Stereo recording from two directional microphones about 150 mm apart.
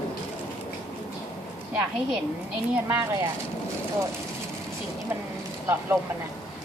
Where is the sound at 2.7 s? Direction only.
20° right (ahead or behind).